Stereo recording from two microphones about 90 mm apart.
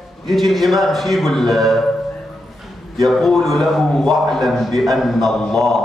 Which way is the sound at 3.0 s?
Centre (ahead or behind).